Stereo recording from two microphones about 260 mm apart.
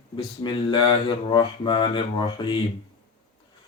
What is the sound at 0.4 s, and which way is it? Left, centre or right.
Mantra, centre.